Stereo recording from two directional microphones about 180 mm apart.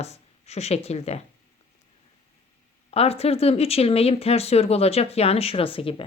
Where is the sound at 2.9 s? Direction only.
35° left (ahead or behind).